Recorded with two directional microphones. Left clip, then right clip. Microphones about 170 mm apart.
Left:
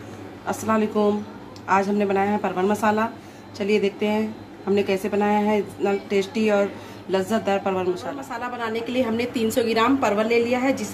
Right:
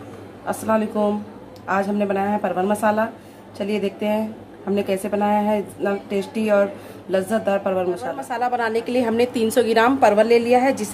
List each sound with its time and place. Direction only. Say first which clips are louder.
0.5 s a woman's voice: right 2 dB; 10° right (ahead or behind)
8.3 s a woman's voice: right 8 dB; 70° right (ahead or behind)